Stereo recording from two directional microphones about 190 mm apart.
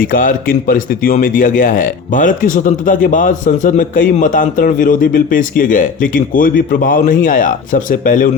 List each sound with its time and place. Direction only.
0.0 s speech: 45° left (ahead or behind)